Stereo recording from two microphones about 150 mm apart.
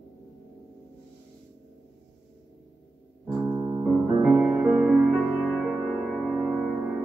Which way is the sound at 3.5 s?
30° right (ahead or behind).